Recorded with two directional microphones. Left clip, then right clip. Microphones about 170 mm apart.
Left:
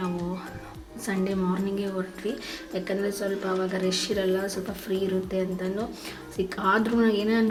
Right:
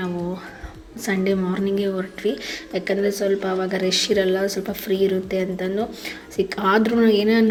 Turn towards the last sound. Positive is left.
turn(degrees=-25)  # may be behind; listen again after turning